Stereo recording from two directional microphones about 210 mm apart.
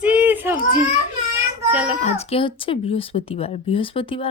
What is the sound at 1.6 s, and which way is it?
Speech, 5° right (ahead or behind).